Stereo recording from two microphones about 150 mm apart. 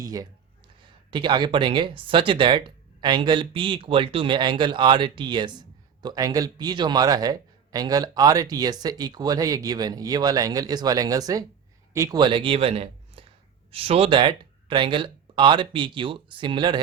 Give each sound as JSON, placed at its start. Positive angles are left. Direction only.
{"t": 0.0, "sound": "speech", "side_deg": -25}